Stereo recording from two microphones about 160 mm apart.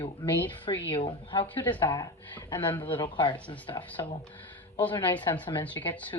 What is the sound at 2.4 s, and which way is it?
Speech, 30° left (ahead or behind).